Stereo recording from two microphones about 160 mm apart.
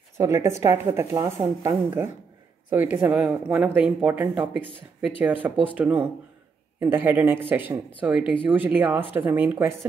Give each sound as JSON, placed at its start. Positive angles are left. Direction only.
{"t": 0.2, "sound": "speech", "side_deg": -15}